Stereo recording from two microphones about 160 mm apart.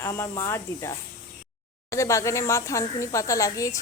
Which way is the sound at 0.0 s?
15° left (ahead or behind).